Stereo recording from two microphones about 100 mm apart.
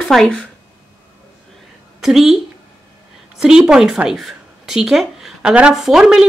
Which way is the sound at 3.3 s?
5° right (ahead or behind).